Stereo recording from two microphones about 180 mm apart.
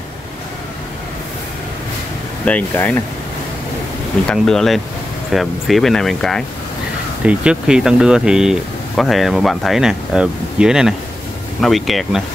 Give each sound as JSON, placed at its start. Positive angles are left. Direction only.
{"t": 2.4, "sound": "speech", "side_deg": 10}
{"t": 4.3, "sound": "speech", "side_deg": 5}